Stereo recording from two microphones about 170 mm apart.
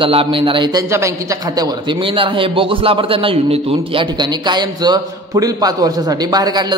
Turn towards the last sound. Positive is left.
turn(degrees=-25)  # may be behind; listen again after turning